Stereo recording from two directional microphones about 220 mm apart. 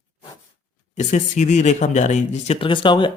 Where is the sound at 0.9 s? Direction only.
30° left (ahead or behind).